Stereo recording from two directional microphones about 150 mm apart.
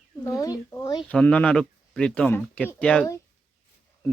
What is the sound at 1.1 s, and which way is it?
Speech, 10° left (ahead or behind).